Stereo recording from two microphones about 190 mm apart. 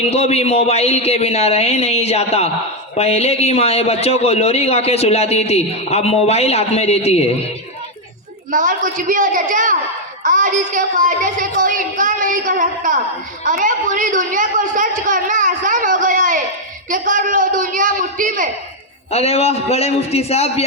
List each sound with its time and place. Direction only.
0.0 s a man's voice: 35° left (ahead or behind)
8.4 s a woman's voice: 45° right (ahead or behind)
19.1 s a man's voice: 35° left (ahead or behind)